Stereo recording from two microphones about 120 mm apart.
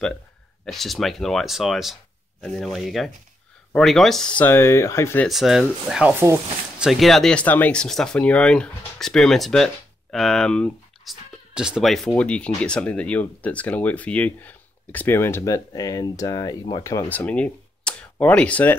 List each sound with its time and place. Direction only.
0.7 s speech: centre (ahead or behind); by 5.2 s 20° left (ahead or behind)
5.3 s speech: 5° right (ahead or behind)
6.1 s speech: 20° right (ahead or behind)
6.8 s speech: centre (ahead or behind)
11.5 s speech: 5° right (ahead or behind); by 16.8 s 35° left (ahead or behind)
17.1 s a sound: 15° left (ahead or behind)
18.1 s speech: 10° left (ahead or behind)